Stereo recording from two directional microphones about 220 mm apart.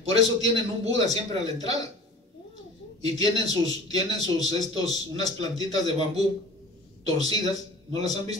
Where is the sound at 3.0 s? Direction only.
15° left (ahead or behind).